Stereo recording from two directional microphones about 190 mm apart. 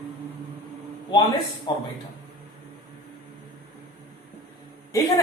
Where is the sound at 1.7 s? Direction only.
25° left (ahead or behind).